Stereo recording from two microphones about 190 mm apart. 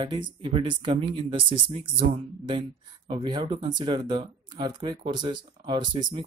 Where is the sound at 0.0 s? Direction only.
25° right (ahead or behind).